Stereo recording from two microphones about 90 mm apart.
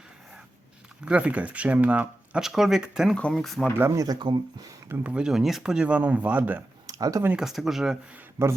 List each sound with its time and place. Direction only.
1.0 s speech: 15° right (ahead or behind)
2.4 s speech: 5° right (ahead or behind)
3.8 s speech: 30° right (ahead or behind)
4.3 s speech: 60° right (ahead or behind)
4.9 s speech: 15° right (ahead or behind)
6.8 s a sound: 40° right (ahead or behind)
7.3 s speech: 5° right (ahead or behind)
8.4 s speech: 25° right (ahead or behind)